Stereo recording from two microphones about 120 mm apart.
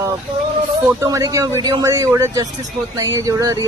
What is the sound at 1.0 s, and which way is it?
A man's voice, 30° right (ahead or behind).